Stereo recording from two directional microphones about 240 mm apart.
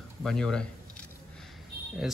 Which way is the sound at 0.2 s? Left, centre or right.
Centre.